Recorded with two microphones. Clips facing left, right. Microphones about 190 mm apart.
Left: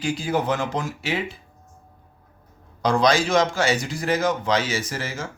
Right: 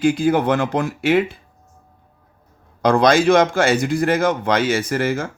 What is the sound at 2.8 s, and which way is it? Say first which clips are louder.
A man's voice: right 6 dB; 55° right (ahead or behind).